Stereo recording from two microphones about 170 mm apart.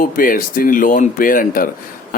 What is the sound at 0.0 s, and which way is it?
Speech, 55° left (ahead or behind).